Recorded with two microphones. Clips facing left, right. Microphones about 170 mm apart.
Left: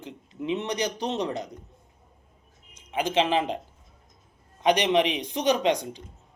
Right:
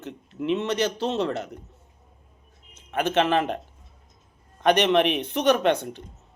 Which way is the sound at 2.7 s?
15° left (ahead or behind).